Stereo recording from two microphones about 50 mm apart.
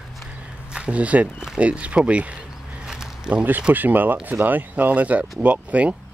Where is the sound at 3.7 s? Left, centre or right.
Right.